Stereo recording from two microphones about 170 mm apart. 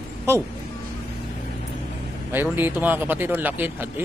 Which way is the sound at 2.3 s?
10° right (ahead or behind).